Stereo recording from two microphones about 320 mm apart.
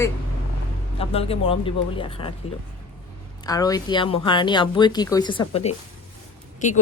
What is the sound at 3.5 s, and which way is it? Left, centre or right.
Speech, centre.